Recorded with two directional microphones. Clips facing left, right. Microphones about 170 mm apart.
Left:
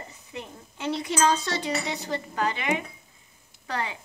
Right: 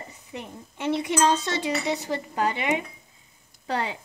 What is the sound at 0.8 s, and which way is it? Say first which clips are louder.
Speech: right 2 dB; 30° right (ahead or behind).